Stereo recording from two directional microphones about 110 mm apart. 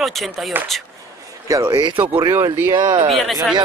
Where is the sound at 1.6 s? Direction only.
45° right (ahead or behind).